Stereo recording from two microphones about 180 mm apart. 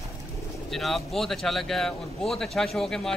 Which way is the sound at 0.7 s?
Centre (ahead or behind).